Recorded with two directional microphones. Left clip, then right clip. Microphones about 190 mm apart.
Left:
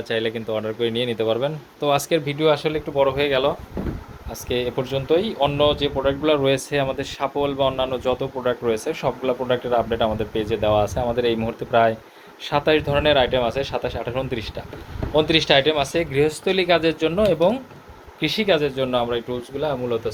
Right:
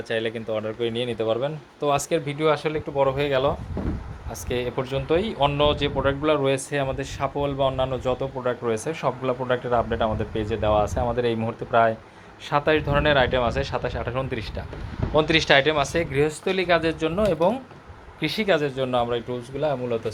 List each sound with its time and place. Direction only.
0.1 s speech: 15° left (ahead or behind)
4.5 s speech: 15° left (ahead or behind)
18.6 s a man's voice: centre (ahead or behind)